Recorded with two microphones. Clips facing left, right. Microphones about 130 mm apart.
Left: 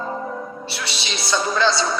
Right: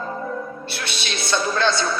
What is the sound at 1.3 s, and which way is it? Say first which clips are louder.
Speech: left 1 dB; 15° left (ahead or behind).